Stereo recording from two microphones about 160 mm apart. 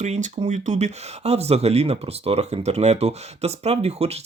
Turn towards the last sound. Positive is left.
turn(degrees=-40)  # may be behind; listen again after turning